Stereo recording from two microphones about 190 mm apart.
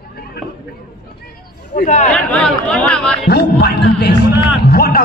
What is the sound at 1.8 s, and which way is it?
Speech, 40° left (ahead or behind).